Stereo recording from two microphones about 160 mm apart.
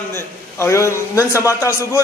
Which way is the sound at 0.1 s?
15° left (ahead or behind).